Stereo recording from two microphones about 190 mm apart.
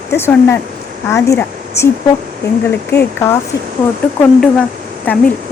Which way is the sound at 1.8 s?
15° left (ahead or behind).